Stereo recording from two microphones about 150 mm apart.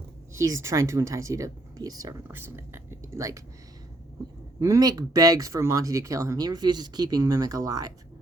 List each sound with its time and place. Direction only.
0.3 s speech: 20° right (ahead or behind)
4.6 s speech: 20° right (ahead or behind)